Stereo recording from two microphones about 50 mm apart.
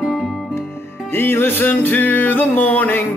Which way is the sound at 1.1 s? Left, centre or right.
Left.